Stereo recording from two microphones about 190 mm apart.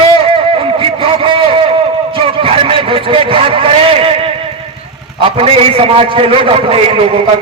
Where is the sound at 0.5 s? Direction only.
30° right (ahead or behind).